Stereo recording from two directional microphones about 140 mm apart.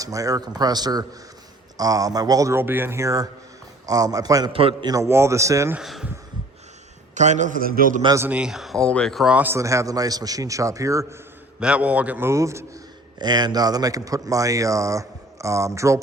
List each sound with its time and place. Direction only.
0.0 s speech: 25° right (ahead or behind)
4.5 s a man's voice: 40° right (ahead or behind)
4.9 s speech: 20° right (ahead or behind)
5.7 s speech: 5° right (ahead or behind)
7.1 s a man's voice: 60° right (ahead or behind); by 8.0 s 80° right
8.0 s speech: 25° right (ahead or behind)
8.3 s speech: 5° right (ahead or behind); by 11.0 s 20° right (ahead or behind)
11.6 s a man's voice: 10° right (ahead or behind)